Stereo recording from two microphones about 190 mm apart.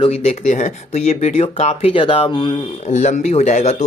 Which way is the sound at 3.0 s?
40° left (ahead or behind).